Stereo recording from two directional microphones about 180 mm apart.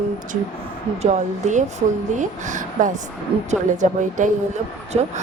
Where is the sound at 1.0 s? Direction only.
40° right (ahead or behind).